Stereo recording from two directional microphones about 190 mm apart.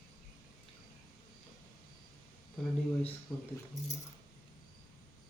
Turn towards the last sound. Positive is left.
turn(degrees=0)  # may be behind; listen again after turning